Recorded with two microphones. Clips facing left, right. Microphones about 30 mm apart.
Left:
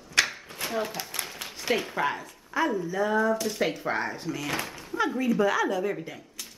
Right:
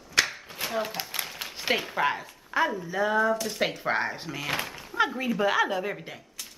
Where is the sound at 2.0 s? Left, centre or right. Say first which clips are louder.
Right 2 dB; right.